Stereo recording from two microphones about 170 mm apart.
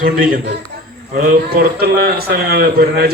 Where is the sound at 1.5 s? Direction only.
65° right (ahead or behind).